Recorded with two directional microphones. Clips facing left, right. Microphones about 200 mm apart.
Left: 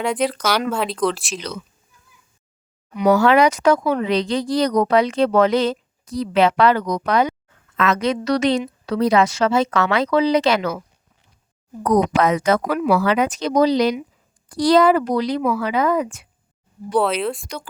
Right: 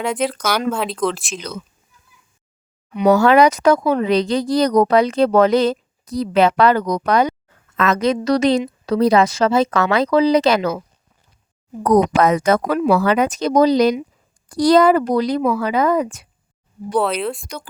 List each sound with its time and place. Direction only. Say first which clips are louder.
0.0 s speech: even; centre (ahead or behind)
2.9 s speech: right 2 dB; 25° right (ahead or behind)
3.2 s a woman's voice: right 2 dB; 40° right (ahead or behind)
11.8 s speech: right 3 dB; 45° right (ahead or behind)
12.6 s speech: right 2 dB; 25° right (ahead or behind)
13.1 s speech: right 2 dB; 45° right (ahead or behind)
16.9 s speech: even; centre (ahead or behind)